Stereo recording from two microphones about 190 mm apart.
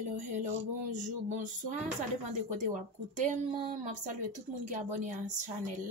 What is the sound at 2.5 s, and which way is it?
Speech, 40° right (ahead or behind).